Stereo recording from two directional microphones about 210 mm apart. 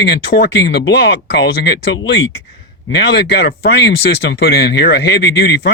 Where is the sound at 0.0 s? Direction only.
50° left (ahead or behind).